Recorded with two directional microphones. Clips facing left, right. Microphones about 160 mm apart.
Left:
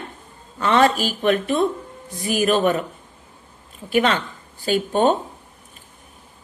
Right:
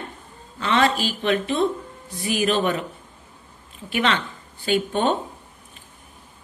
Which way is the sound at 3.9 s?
40° left (ahead or behind).